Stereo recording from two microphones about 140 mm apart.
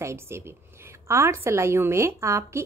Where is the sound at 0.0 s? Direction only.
20° right (ahead or behind).